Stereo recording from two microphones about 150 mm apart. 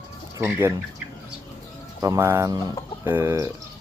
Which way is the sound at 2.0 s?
20° right (ahead or behind).